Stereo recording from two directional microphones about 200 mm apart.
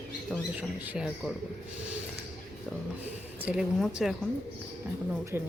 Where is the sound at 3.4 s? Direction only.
5° right (ahead or behind).